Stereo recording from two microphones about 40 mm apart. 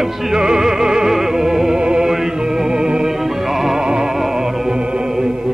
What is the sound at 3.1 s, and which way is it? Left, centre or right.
Music, centre.